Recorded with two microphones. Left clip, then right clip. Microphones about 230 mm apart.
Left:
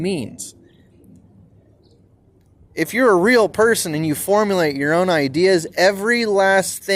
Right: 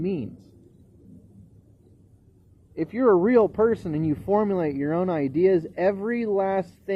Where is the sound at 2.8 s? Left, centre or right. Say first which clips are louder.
Left 5 dB; centre.